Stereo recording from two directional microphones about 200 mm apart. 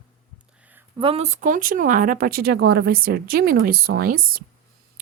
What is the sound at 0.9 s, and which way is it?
Speech, 30° right (ahead or behind).